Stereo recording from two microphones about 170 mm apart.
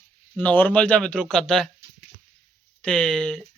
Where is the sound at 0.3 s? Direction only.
10° left (ahead or behind).